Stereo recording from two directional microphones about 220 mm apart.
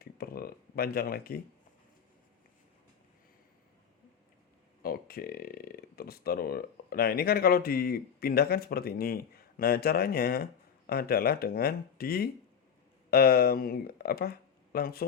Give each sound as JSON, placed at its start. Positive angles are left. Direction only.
{"t": 0.0, "sound": "speech", "side_deg": 45}
{"t": 4.8, "sound": "speech", "side_deg": 45}